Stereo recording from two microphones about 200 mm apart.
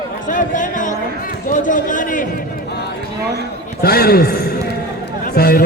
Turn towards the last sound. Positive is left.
turn(degrees=50)  # may be behind; listen again after turning